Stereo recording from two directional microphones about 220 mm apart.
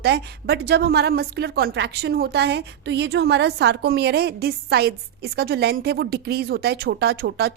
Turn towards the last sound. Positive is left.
turn(degrees=-45)  # may be behind; listen again after turning